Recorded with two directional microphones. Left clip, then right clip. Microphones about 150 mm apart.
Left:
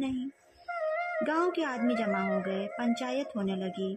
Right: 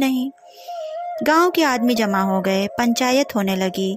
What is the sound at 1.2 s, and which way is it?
A woman's voice, 50° right (ahead or behind).